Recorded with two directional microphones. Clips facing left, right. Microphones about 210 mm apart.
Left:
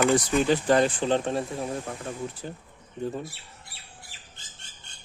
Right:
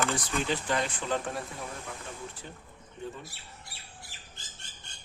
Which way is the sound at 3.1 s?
40° left (ahead or behind).